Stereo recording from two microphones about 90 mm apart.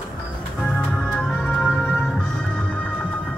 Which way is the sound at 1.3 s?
15° left (ahead or behind).